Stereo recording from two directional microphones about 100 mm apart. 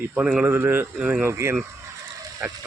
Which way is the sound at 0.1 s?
15° right (ahead or behind).